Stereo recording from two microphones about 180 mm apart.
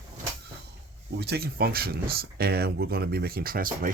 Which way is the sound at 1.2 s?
60° right (ahead or behind).